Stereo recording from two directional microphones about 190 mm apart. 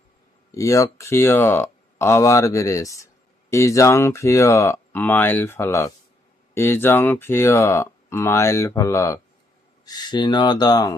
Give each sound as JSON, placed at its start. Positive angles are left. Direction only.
{"t": 0.5, "sound": "speech", "side_deg": 15}